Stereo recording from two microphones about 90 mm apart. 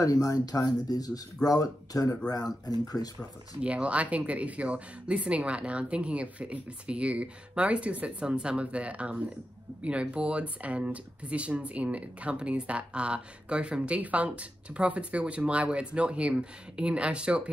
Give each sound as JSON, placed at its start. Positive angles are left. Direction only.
{"t": 0.0, "sound": "speech", "side_deg": 40}
{"t": 3.6, "sound": "speech", "side_deg": -15}